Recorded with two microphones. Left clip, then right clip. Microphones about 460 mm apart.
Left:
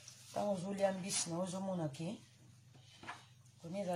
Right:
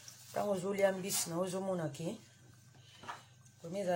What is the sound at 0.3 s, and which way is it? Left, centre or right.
Speech, left.